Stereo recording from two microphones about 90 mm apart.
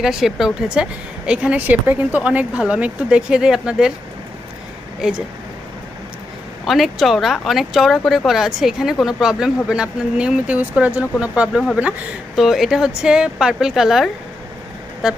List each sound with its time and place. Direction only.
0.0 s a woman's voice: 5° right (ahead or behind)
4.9 s speech: 5° right (ahead or behind)
6.7 s a woman's voice: centre (ahead or behind)
12.4 s speech: centre (ahead or behind)